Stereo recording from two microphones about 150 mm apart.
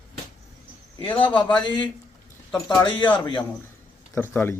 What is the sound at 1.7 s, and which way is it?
A man's voice, 30° left (ahead or behind).